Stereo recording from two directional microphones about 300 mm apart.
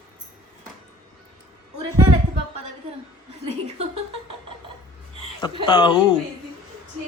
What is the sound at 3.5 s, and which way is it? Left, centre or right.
Laughter, right.